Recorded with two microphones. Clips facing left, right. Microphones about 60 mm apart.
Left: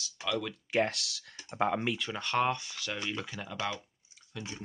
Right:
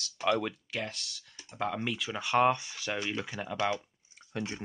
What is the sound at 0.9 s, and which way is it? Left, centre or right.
Speech, left.